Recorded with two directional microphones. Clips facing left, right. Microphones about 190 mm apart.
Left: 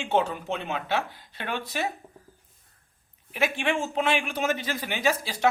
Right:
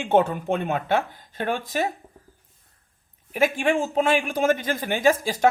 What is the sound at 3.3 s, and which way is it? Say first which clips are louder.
Speech: right 5 dB; 45° right (ahead or behind).